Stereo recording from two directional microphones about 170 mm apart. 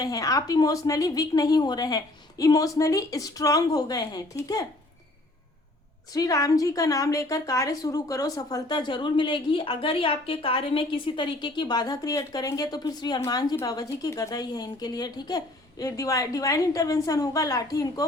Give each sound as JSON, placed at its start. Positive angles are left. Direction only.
{"t": 0.0, "sound": "a woman's voice", "side_deg": 20}
{"t": 6.1, "sound": "a woman's voice", "side_deg": 20}